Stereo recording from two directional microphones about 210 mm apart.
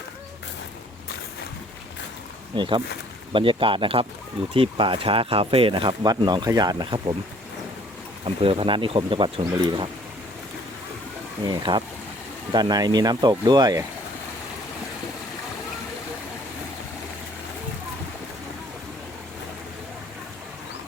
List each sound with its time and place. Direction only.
2.6 s speech: 20° right (ahead or behind)
8.2 s speech: 25° right (ahead or behind)
11.4 s speech: 20° right (ahead or behind)